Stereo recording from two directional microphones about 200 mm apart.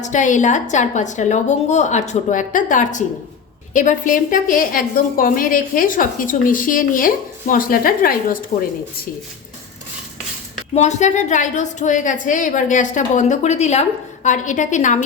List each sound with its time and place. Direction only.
0.0 s a woman's voice: 40° left (ahead or behind)
10.8 s a woman's voice: 35° left (ahead or behind)